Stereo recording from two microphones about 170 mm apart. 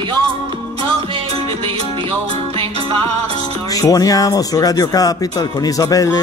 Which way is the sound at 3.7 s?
20° left (ahead or behind).